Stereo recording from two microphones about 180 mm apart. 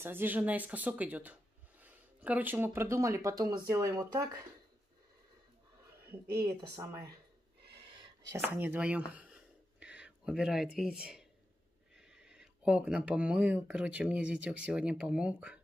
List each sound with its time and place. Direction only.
0.0 s speech: 10° right (ahead or behind)
6.3 s speech: 15° right (ahead or behind)
8.0 s a sound: 20° right (ahead or behind)
12.0 s speech: 5° right (ahead or behind)